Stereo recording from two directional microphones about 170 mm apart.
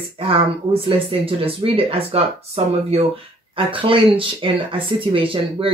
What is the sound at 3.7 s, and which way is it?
Speech, 30° right (ahead or behind).